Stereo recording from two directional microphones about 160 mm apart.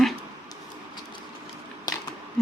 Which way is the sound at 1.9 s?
25° left (ahead or behind).